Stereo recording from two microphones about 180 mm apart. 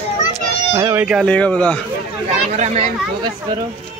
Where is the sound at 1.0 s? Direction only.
Centre (ahead or behind).